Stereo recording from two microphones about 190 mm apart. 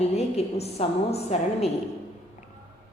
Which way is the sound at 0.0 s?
35° left (ahead or behind).